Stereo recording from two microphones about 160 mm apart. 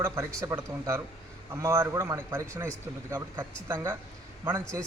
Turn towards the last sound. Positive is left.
turn(degrees=-15)  # may be behind; listen again after turning